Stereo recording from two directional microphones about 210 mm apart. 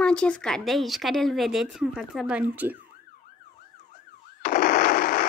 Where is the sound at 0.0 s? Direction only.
5° left (ahead or behind).